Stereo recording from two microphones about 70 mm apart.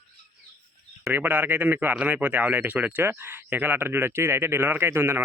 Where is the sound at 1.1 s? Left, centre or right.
Right.